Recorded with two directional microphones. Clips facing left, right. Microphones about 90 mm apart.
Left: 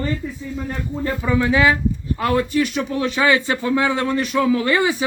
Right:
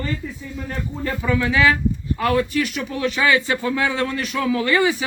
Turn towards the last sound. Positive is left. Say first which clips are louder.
# left 1 dB
turn(degrees=25)  # may be behind; listen again after turning